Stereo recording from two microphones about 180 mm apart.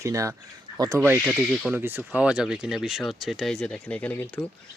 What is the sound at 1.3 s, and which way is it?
Speech, 5° right (ahead or behind).